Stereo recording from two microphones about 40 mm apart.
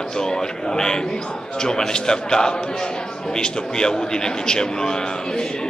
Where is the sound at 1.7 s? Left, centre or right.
Centre.